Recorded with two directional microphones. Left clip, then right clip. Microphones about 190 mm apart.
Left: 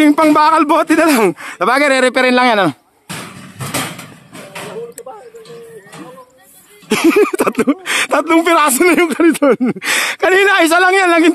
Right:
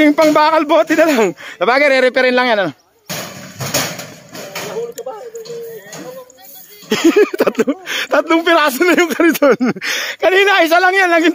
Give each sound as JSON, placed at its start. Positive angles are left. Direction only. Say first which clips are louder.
{"t": 0.0, "sound": "speech", "louder": "left 1 dB", "side_deg": 35}
{"t": 3.1, "sound": "a sound", "louder": "right 3 dB", "side_deg": -5}
{"t": 6.9, "sound": "speech", "louder": "even", "side_deg": 35}
{"t": 9.8, "sound": "speech", "louder": "left 3 dB", "side_deg": 40}